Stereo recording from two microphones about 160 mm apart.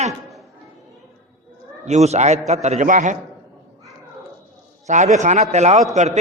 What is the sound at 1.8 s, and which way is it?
A man's voice, 45° right (ahead or behind).